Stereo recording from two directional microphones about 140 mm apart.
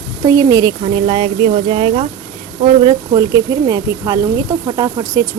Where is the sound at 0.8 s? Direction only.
40° right (ahead or behind).